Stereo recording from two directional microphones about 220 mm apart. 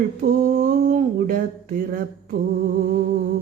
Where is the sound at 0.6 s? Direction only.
35° right (ahead or behind).